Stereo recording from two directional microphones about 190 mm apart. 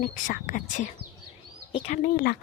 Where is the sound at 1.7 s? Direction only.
35° left (ahead or behind).